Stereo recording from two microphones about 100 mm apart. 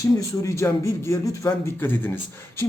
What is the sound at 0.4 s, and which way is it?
Speech, 30° left (ahead or behind).